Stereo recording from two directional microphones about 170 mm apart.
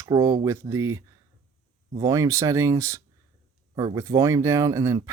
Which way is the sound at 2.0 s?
20° right (ahead or behind).